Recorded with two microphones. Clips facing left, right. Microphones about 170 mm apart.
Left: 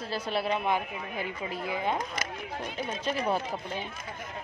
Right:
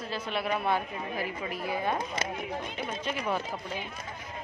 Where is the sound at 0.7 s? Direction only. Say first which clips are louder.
Even; 20° left (ahead or behind).